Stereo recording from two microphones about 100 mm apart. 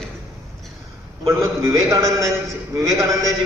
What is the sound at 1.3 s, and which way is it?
A man's voice, 30° right (ahead or behind).